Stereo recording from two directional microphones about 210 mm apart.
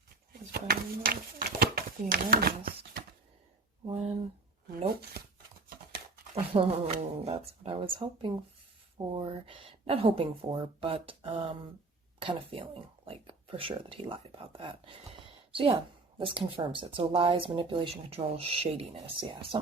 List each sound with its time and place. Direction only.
0.5 s speech: 45° right (ahead or behind)
5.2 s a sound: 50° right (ahead or behind)
6.3 s a woman's voice: 25° right (ahead or behind)